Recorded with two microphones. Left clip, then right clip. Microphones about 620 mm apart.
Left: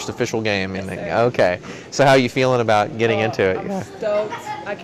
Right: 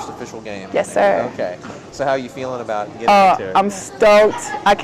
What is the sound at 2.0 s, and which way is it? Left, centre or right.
Speech, left.